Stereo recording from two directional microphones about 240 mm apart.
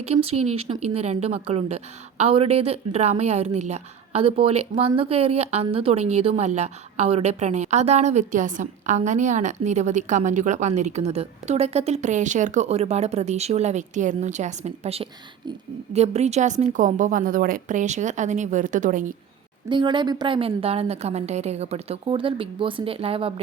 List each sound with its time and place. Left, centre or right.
0.0 s a woman's voice: right
19.6 s speech: centre